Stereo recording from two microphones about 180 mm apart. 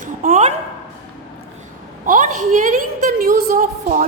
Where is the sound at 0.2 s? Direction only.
40° right (ahead or behind).